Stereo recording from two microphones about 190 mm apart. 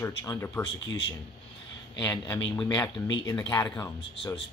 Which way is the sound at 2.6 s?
20° left (ahead or behind).